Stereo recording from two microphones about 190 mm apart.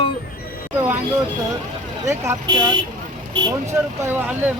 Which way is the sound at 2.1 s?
15° right (ahead or behind).